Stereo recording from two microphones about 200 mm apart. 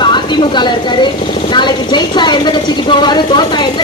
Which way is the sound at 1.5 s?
20° left (ahead or behind).